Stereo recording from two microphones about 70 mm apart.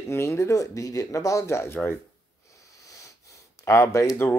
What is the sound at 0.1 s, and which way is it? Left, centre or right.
Speech, left.